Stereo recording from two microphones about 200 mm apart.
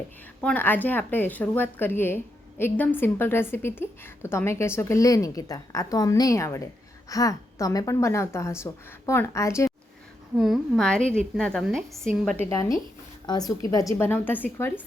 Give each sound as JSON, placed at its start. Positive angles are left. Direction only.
{"t": 0.4, "sound": "a woman's voice", "side_deg": 10}
{"t": 10.3, "sound": "a woman's voice", "side_deg": 0}
{"t": 12.5, "sound": "a woman's voice", "side_deg": 15}